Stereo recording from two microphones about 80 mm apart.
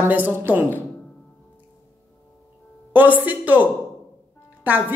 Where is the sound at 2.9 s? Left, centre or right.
Right.